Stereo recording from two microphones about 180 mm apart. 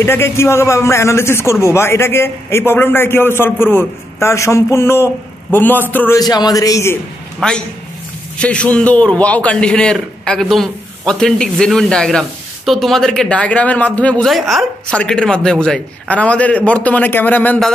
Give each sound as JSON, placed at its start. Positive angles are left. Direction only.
{"t": 0.0, "sound": "a man's voice", "side_deg": 15}
{"t": 6.1, "sound": "a man's voice", "side_deg": 20}
{"t": 7.3, "sound": "a man's voice", "side_deg": 5}